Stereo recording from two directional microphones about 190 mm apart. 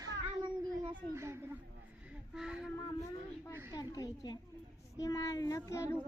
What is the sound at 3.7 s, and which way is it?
A woman's voice, 20° left (ahead or behind).